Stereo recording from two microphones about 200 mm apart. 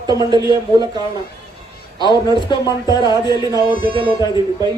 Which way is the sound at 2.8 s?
20° left (ahead or behind).